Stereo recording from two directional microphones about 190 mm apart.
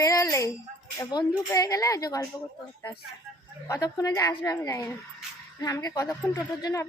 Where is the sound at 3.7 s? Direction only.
20° left (ahead or behind).